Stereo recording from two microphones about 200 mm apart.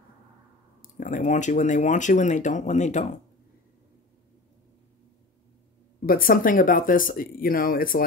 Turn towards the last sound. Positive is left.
turn(degrees=45)  # may be behind; listen again after turning